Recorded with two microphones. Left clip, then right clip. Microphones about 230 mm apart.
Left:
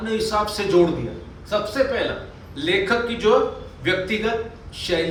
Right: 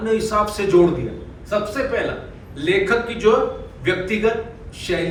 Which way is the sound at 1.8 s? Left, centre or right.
Left.